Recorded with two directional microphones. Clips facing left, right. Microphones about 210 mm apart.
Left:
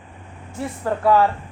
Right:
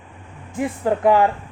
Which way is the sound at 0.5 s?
15° right (ahead or behind).